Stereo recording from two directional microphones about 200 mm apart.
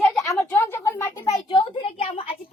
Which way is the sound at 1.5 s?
25° left (ahead or behind).